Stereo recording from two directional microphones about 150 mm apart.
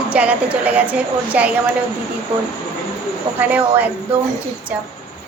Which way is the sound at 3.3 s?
10° right (ahead or behind).